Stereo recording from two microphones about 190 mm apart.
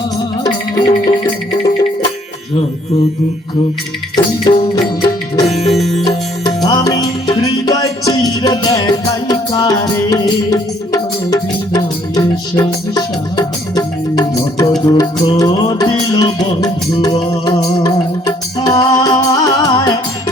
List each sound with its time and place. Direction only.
0.8 s music: 25° left (ahead or behind)
4.4 s music: 20° left (ahead or behind)
5.5 s music: 35° left (ahead or behind)
5.7 s music: centre (ahead or behind)
6.6 s music: 20° left (ahead or behind)